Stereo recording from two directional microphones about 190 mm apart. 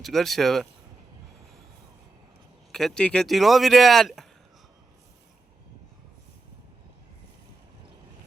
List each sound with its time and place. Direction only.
0.0 s speech: centre (ahead or behind)
2.7 s speech: 5° left (ahead or behind)